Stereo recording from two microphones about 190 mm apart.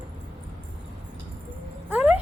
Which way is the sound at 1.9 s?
5° right (ahead or behind).